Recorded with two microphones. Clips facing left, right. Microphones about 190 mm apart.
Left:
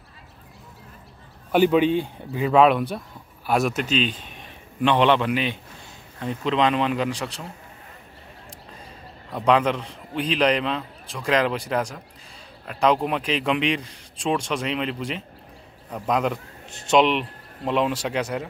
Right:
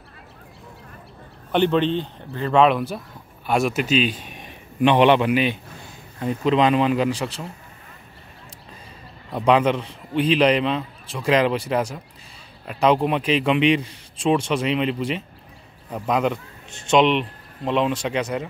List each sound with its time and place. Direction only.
1.5 s a man's voice: 5° left (ahead or behind)
9.3 s a man's voice: 5° right (ahead or behind)